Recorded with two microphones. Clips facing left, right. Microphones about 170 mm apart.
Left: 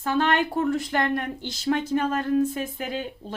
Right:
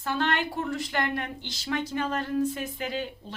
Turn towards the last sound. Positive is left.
turn(degrees=45)  # may be behind; listen again after turning